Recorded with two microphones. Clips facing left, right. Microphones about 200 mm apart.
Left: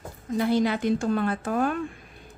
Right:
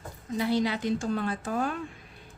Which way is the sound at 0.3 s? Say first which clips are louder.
Left 4 dB; 50° left (ahead or behind).